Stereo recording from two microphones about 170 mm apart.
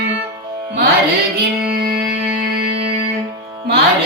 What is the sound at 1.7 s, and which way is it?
Music, 60° right (ahead or behind).